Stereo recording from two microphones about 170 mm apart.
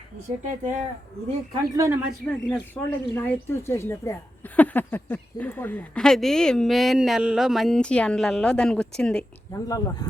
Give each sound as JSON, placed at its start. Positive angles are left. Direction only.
{"t": 0.4, "sound": "speech", "side_deg": -50}
{"t": 1.7, "sound": "a man's voice", "side_deg": -20}
{"t": 2.0, "sound": "speech", "side_deg": 0}
{"t": 2.7, "sound": "speech", "side_deg": 10}
{"t": 9.5, "sound": "speech", "side_deg": 20}